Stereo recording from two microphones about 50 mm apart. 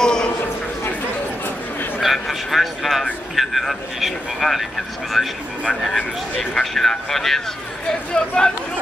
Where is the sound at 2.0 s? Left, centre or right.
Centre.